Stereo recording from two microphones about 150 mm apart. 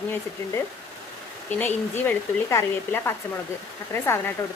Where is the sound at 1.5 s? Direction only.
10° left (ahead or behind).